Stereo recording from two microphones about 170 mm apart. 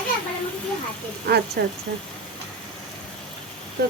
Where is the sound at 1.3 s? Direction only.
80° right.